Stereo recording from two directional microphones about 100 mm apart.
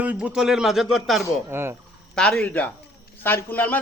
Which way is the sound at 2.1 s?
10° left (ahead or behind).